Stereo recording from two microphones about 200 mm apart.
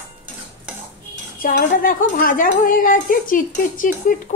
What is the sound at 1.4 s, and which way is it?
Speech, 45° left (ahead or behind).